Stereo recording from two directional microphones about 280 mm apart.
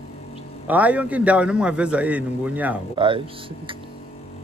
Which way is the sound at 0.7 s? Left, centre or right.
Centre.